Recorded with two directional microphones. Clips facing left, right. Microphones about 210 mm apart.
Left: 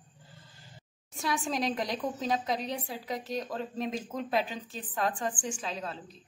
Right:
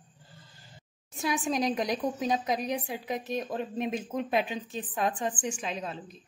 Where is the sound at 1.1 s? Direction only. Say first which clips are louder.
Right 3 dB; 20° right (ahead or behind).